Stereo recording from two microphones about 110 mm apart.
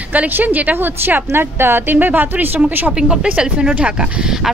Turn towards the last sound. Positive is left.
turn(degrees=-5)  # may be behind; listen again after turning